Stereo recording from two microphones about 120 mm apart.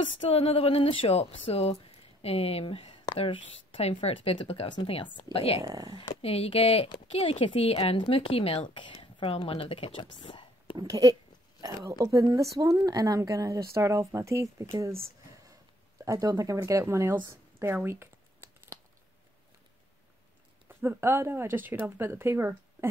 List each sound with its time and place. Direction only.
0.2 s speech: 50° left (ahead or behind)
5.6 s speech: 30° right (ahead or behind)
5.9 s speech: 50° left (ahead or behind)
10.1 s whispering: 40° left (ahead or behind)
10.8 s a woman's voice: 30° right (ahead or behind)
16.1 s a woman's voice: 25° right (ahead or behind)
17.8 s a sound: 20° right (ahead or behind)
20.6 s a woman's voice: 15° right (ahead or behind)